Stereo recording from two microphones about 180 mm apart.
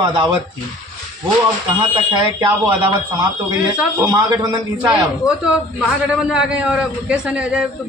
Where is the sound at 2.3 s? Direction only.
25° right (ahead or behind).